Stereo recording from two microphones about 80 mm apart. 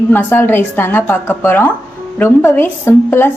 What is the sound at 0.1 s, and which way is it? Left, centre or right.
Speech, left.